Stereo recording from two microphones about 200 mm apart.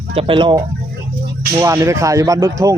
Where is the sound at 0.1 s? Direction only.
25° right (ahead or behind).